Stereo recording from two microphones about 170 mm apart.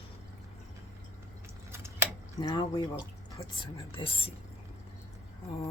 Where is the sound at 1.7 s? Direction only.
15° right (ahead or behind).